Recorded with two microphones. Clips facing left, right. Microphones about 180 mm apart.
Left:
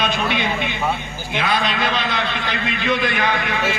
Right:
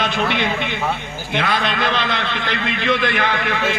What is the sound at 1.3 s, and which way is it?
A man's voice, 55° right (ahead or behind).